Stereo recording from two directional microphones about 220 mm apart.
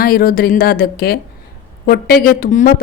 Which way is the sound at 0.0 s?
40° left (ahead or behind).